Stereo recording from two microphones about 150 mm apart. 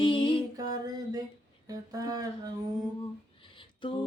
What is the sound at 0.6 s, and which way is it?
Mantra, 25° right (ahead or behind).